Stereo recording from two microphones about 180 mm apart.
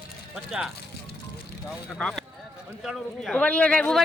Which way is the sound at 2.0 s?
5° left (ahead or behind).